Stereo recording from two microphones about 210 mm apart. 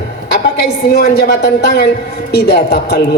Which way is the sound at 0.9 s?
50° left (ahead or behind).